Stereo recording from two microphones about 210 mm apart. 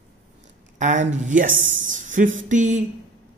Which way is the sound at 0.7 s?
35° right (ahead or behind).